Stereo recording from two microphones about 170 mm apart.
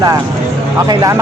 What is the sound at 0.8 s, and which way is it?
Speech, 20° right (ahead or behind).